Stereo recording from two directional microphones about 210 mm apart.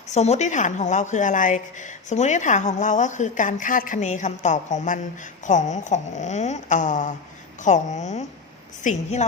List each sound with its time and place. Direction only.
0.1 s a woman's voice: 30° left (ahead or behind)